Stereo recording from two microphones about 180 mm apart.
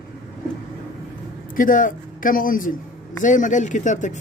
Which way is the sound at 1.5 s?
50° left (ahead or behind).